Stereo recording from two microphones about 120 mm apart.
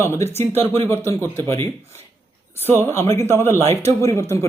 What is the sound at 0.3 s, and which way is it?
Speech, 20° left (ahead or behind).